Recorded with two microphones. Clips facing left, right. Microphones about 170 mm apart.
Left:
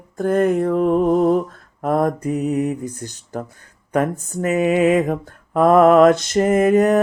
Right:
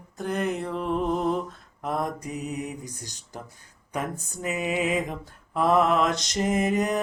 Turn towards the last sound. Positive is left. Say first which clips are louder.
# left 10 dB
turn(degrees=55)  # may be behind; listen again after turning